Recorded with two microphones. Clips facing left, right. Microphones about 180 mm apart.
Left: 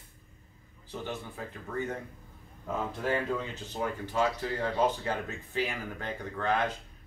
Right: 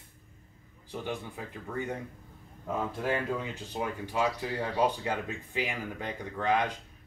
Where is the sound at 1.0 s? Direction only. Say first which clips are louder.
Right 1 dB; 15° right (ahead or behind).